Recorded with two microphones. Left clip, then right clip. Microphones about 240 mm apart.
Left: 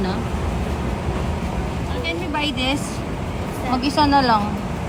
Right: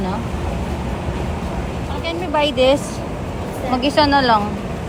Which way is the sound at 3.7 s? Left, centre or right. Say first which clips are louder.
Right 2 dB; left.